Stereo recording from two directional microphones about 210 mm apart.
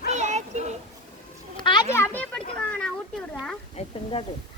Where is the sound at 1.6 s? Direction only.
20° left (ahead or behind).